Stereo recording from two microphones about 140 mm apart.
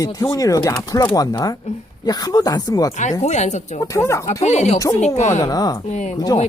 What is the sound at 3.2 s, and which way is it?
Speech, 55° left (ahead or behind).